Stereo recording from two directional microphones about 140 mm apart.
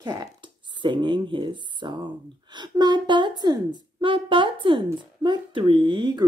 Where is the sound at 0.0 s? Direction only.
30° right (ahead or behind).